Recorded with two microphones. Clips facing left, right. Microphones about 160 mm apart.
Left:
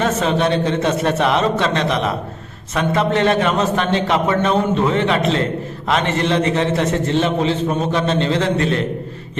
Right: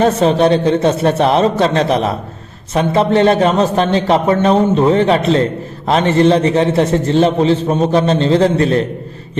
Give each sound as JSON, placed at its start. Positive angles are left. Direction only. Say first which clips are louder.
{"t": 0.0, "sound": "a man's voice", "louder": "right 6 dB", "side_deg": -35}